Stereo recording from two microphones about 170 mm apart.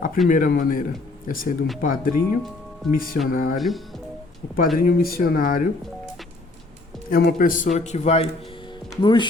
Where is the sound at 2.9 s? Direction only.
55° left (ahead or behind).